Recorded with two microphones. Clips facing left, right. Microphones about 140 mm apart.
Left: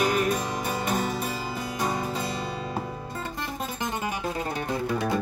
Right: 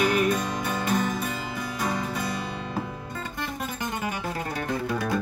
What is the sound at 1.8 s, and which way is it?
Music, 30° left (ahead or behind).